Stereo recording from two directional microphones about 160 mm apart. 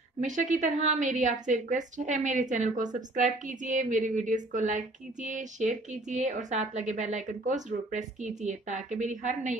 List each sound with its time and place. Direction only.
0.2 s a woman's voice: 50° right (ahead or behind)